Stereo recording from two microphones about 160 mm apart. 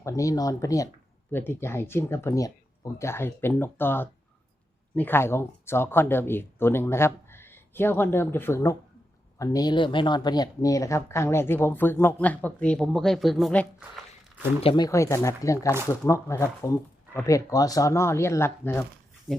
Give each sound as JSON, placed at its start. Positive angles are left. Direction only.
{"t": 0.0, "sound": "speech", "side_deg": 20}
{"t": 14.6, "sound": "speech", "side_deg": 35}
{"t": 14.8, "sound": "speech", "side_deg": 20}
{"t": 19.3, "sound": "a sound", "side_deg": 0}